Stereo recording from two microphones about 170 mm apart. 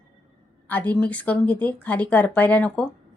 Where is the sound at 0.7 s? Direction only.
10° left (ahead or behind).